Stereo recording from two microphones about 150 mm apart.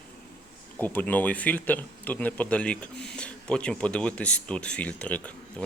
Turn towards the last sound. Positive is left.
turn(degrees=10)  # may be behind; listen again after turning